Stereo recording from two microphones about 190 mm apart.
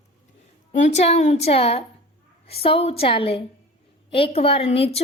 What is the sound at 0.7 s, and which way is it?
A woman's voice, 35° left (ahead or behind).